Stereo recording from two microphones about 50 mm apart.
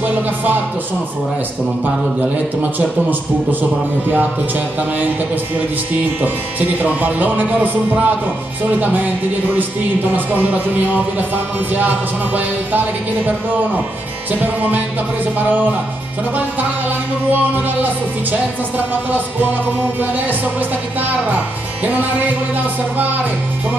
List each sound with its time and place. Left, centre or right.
6.2 s music: right
21.8 s music: right